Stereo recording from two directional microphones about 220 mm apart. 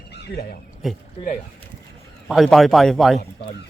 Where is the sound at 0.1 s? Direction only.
50° left (ahead or behind).